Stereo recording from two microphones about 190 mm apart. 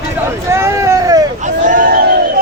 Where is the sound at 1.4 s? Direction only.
45° right (ahead or behind).